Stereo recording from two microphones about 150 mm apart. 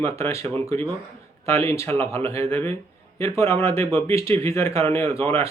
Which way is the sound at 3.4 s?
20° left (ahead or behind).